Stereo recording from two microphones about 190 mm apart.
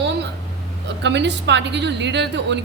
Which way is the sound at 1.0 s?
65° right (ahead or behind).